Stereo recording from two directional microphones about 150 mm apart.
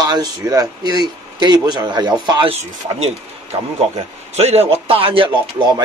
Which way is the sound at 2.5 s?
45° right (ahead or behind).